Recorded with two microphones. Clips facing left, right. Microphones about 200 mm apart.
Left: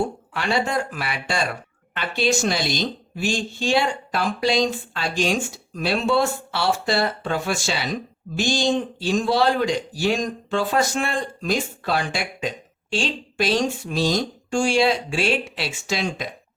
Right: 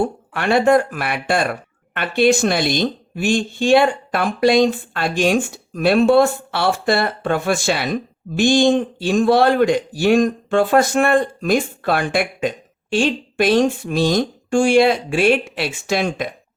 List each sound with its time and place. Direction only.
0.3 s a man's voice: 55° right (ahead or behind)